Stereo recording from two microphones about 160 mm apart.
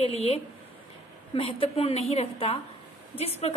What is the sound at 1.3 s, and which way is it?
A woman's voice, 35° left (ahead or behind).